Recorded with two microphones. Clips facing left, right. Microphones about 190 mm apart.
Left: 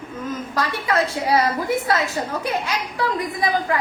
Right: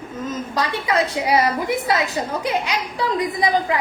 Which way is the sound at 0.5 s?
15° right (ahead or behind).